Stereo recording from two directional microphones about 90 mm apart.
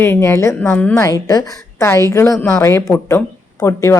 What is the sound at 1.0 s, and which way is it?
Speech, 35° left (ahead or behind).